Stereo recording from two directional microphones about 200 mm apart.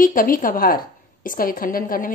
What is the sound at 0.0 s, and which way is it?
A woman's voice, 45° left (ahead or behind).